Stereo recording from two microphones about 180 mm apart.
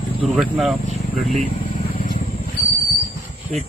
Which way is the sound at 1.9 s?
50° left (ahead or behind).